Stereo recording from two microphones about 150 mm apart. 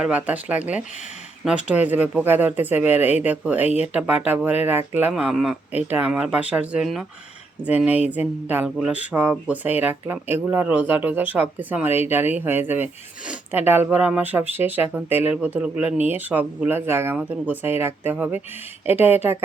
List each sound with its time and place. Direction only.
0.0 s speech: 10° right (ahead or behind)